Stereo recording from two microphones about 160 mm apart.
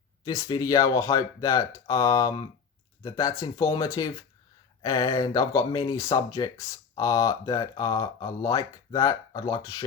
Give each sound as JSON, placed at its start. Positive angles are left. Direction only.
{"t": 0.3, "sound": "speech", "side_deg": 25}